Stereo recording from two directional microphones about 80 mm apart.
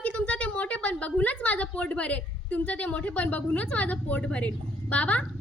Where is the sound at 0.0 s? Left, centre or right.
Centre.